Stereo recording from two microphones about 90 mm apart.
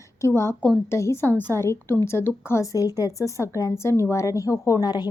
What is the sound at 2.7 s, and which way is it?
Speech, 45° left (ahead or behind).